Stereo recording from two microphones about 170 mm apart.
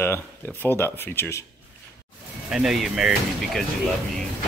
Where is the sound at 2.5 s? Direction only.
Centre (ahead or behind).